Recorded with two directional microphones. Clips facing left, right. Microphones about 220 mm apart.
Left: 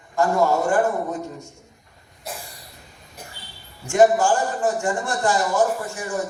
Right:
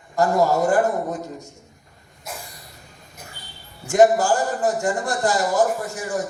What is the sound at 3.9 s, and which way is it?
A man's voice, 40° right (ahead or behind).